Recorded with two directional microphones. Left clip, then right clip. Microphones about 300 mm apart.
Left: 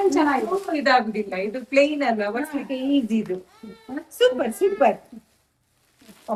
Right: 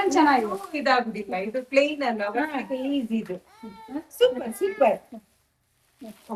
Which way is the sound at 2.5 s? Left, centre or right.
Right.